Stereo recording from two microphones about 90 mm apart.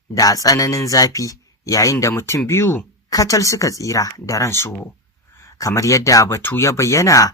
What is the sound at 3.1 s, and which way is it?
Speech, 40° left (ahead or behind).